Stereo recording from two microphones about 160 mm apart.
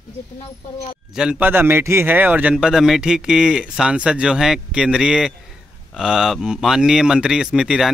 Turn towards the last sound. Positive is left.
turn(degrees=-5)  # may be behind; listen again after turning